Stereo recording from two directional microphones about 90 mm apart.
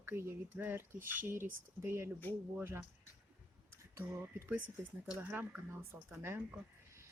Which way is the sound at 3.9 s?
30° right (ahead or behind).